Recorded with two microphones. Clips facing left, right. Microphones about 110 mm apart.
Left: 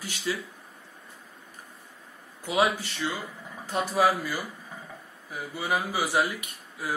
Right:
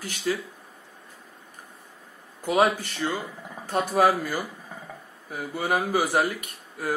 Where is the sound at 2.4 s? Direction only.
50° right (ahead or behind).